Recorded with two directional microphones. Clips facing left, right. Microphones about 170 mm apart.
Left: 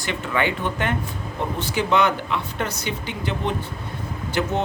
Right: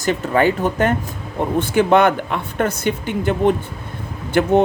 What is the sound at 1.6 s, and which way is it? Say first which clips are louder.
Speech: right 6 dB; 50° right (ahead or behind).